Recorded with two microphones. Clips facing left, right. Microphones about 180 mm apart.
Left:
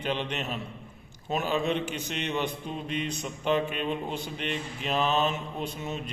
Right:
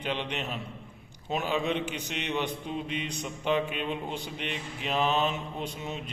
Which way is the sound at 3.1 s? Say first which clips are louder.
Left 2 dB; 15° right (ahead or behind).